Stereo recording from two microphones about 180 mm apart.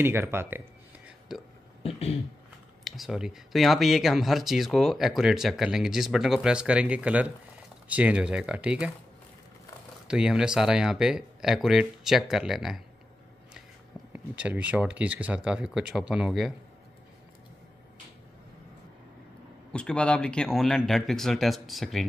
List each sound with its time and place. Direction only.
0.0 s speech: 15° right (ahead or behind)
1.3 s speech: 5° right (ahead or behind)
1.8 s speech: 35° left (ahead or behind)
2.8 s speech: centre (ahead or behind)
10.0 s speech: 5° right (ahead or behind)
14.1 s speech: 10° right (ahead or behind)
19.7 s speech: 5° left (ahead or behind)